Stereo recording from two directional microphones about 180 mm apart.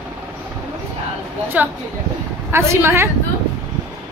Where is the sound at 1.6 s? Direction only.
10° right (ahead or behind).